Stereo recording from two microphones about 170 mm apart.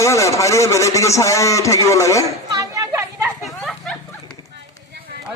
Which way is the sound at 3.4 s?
Centre (ahead or behind).